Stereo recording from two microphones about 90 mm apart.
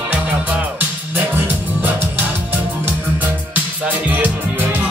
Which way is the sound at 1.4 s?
20° right (ahead or behind).